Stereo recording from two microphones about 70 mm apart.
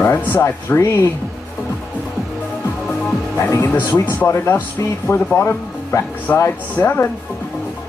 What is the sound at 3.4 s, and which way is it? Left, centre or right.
Speech, left.